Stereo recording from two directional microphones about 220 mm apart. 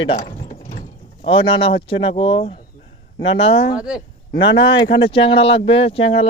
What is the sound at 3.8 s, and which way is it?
Speech, 5° right (ahead or behind).